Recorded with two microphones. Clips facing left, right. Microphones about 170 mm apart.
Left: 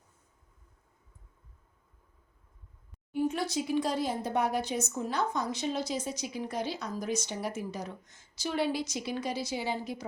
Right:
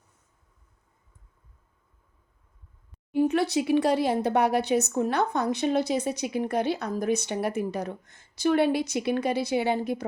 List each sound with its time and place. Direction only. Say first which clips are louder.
3.1 s speech: right 7 dB; 70° right (ahead or behind)